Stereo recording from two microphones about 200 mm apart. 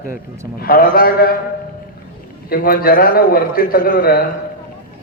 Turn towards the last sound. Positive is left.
turn(degrees=45)  # may be behind; listen again after turning